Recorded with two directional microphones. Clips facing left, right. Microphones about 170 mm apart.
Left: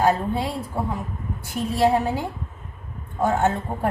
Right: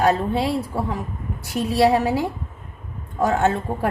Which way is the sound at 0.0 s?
75° right (ahead or behind).